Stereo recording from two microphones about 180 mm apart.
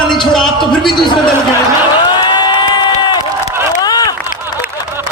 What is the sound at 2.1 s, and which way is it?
Crowd, 25° left (ahead or behind).